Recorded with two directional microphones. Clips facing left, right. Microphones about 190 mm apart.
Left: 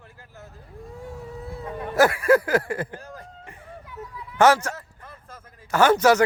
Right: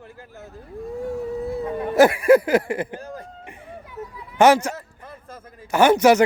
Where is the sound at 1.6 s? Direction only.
15° right (ahead or behind).